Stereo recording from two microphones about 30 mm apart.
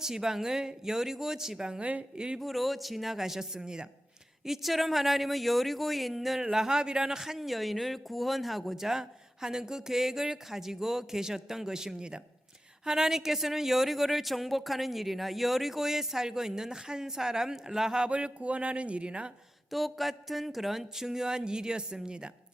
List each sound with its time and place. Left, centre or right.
0.0 s a woman's voice: centre
2.4 s a woman's voice: centre; by 3.8 s right
4.4 s speech: centre
6.4 s speech: centre
7.2 s a woman's voice: centre; by 12.2 s right
12.8 s a woman's voice: centre
18.1 s speech: right
19.7 s speech: centre; by 22.3 s right